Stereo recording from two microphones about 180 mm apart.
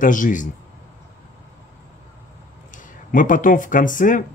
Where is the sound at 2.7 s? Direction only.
50° left (ahead or behind).